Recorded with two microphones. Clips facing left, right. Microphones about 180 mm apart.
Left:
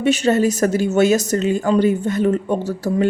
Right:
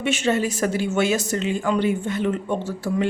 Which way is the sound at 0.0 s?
40° left (ahead or behind).